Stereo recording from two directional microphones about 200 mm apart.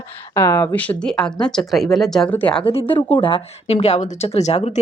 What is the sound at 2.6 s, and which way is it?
Speech, 25° left (ahead or behind).